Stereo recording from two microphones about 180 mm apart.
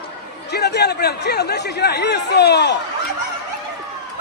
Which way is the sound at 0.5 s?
65° left (ahead or behind).